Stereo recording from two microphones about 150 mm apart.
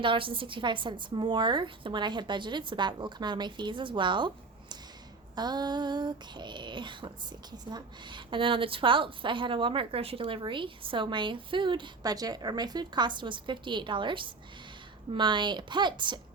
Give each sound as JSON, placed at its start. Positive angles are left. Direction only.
{"t": 0.0, "sound": "a woman's voice", "side_deg": -35}
{"t": 5.3, "sound": "a woman's voice", "side_deg": -30}